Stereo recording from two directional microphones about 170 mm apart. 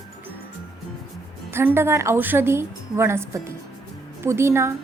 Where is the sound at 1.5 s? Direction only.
15° right (ahead or behind).